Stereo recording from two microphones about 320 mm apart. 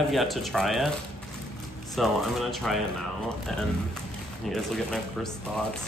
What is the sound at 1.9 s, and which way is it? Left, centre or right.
Speech, centre.